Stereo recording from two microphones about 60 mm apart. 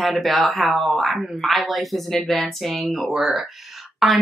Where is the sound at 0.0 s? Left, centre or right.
Centre.